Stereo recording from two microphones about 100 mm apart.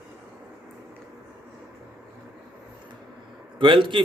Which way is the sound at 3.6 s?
55° right (ahead or behind).